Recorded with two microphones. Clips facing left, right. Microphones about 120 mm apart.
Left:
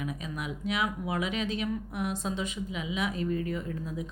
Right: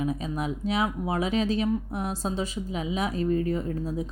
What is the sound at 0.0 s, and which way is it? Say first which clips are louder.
Speech: right 7 dB; 35° right (ahead or behind).